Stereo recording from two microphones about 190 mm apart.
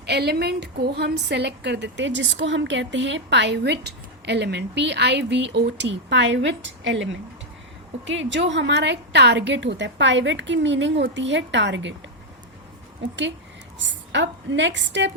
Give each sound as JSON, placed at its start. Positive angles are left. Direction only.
{"t": 0.0, "sound": "a woman's voice", "side_deg": -60}
{"t": 13.0, "sound": "a woman's voice", "side_deg": -70}